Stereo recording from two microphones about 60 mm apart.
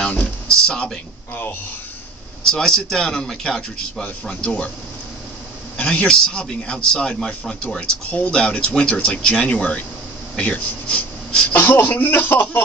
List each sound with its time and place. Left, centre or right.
0.0 s music: centre
2.4 s a man's voice: centre
5.8 s a man's voice: centre
11.5 s speech: left